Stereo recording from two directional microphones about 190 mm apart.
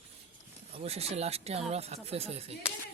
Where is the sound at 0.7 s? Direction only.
30° right (ahead or behind).